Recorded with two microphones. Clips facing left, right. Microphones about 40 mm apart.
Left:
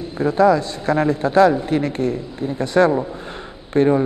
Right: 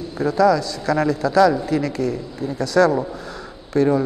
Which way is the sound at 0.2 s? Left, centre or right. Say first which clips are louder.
Left 1 dB; left.